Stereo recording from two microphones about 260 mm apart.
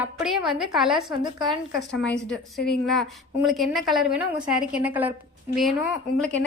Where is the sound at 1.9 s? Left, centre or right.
Centre.